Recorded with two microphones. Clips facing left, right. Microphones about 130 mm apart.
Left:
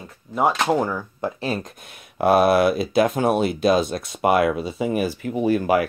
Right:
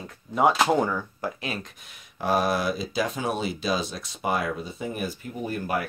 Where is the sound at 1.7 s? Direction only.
55° left (ahead or behind); by 5.8 s 90° left.